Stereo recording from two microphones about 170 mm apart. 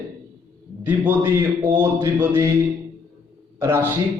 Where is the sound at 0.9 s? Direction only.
10° right (ahead or behind).